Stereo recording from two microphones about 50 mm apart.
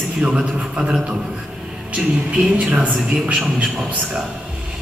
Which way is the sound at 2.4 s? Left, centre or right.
Right.